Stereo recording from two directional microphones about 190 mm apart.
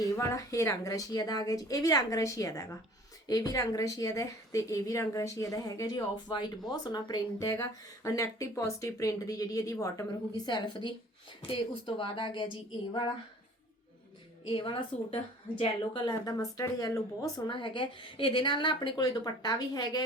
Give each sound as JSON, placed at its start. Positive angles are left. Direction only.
{"t": 0.0, "sound": "a woman's voice", "side_deg": 15}
{"t": 14.4, "sound": "speech", "side_deg": 25}